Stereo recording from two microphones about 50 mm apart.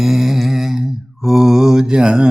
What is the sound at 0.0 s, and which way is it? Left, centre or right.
Mantra, centre.